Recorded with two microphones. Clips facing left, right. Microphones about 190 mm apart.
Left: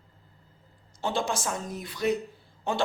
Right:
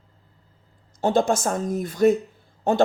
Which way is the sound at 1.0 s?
45° right (ahead or behind).